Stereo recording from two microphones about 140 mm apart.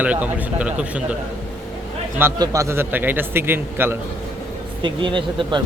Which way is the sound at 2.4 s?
25° right (ahead or behind).